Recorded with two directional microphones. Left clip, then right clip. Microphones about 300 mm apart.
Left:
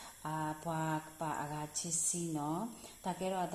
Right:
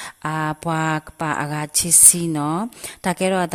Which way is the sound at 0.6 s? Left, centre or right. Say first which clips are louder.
Right 16 dB; right.